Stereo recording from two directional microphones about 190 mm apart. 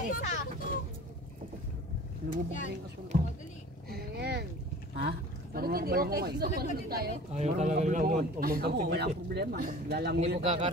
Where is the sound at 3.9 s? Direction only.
60° right (ahead or behind).